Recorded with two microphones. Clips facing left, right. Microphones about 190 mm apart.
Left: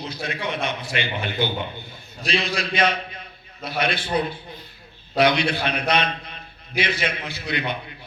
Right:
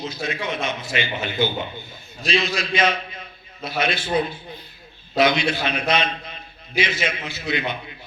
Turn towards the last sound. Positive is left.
turn(degrees=60)  # may be behind; listen again after turning